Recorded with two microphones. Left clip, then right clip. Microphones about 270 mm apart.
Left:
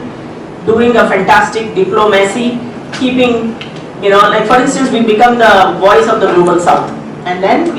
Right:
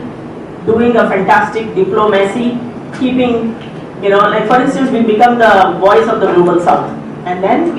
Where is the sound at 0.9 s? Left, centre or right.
Centre.